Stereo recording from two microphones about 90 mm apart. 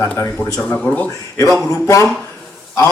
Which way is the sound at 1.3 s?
35° left (ahead or behind).